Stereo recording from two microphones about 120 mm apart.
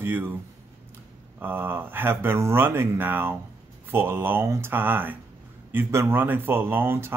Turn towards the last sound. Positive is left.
turn(degrees=-20)  # may be behind; listen again after turning